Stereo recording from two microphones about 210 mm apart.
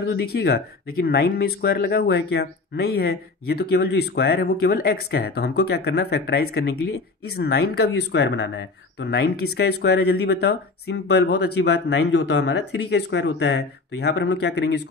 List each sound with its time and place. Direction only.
0.1 s speech: 50° left (ahead or behind)